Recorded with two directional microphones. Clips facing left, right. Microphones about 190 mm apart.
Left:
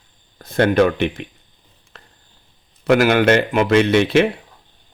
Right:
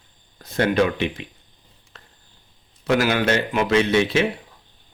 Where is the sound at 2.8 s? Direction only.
55° left (ahead or behind).